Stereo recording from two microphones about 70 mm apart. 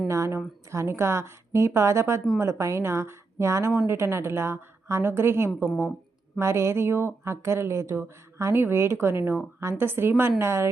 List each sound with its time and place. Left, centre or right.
0.1 s speech: right